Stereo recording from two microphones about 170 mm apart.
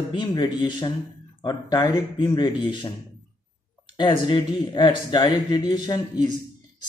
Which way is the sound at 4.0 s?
25° left (ahead or behind).